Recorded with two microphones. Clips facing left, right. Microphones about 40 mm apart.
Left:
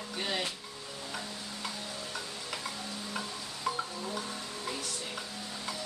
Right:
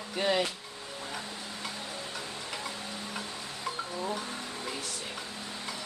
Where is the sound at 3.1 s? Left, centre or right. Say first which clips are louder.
Even; centre.